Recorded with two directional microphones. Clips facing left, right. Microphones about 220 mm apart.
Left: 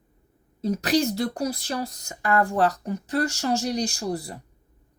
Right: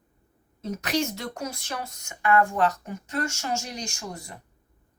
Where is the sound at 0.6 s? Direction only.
35° left (ahead or behind).